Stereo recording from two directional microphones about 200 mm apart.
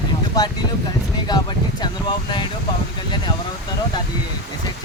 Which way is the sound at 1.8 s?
20° left (ahead or behind).